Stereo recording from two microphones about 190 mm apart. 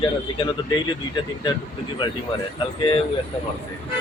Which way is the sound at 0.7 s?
25° left (ahead or behind).